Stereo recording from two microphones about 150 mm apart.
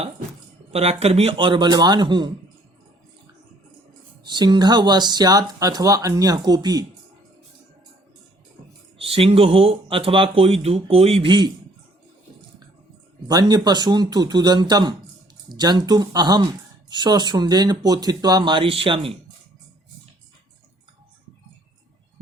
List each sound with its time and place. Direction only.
0.7 s speech: 45° right (ahead or behind)
4.2 s speech: 30° right (ahead or behind)
9.0 s speech: 40° right (ahead or behind)
13.2 s speech: 25° right (ahead or behind)